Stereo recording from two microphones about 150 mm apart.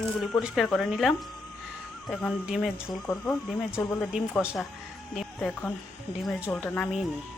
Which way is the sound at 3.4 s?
Centre (ahead or behind).